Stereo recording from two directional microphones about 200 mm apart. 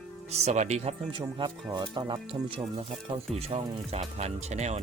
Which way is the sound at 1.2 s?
20° right (ahead or behind).